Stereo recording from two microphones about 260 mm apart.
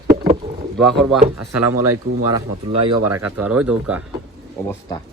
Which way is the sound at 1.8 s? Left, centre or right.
Right.